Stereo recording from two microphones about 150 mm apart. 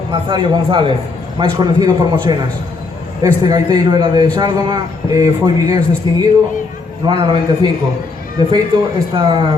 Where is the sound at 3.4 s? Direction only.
30° right (ahead or behind).